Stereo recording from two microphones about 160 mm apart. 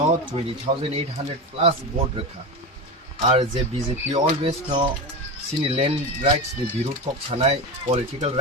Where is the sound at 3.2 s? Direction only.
35° right (ahead or behind).